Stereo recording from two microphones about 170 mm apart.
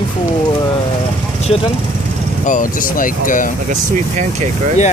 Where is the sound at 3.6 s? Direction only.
45° right (ahead or behind).